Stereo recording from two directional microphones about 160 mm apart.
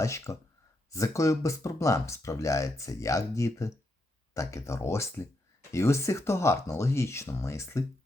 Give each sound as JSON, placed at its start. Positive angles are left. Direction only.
{"t": 0.0, "sound": "speech", "side_deg": 20}